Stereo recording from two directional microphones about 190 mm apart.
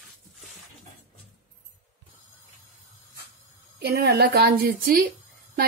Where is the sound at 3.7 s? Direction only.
55° right (ahead or behind).